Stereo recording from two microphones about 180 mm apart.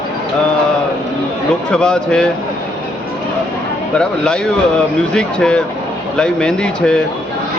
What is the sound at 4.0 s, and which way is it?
Speech, 5° left (ahead or behind).